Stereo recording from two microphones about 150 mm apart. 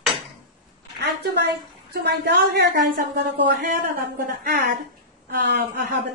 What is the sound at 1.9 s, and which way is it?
Speech, 90° right.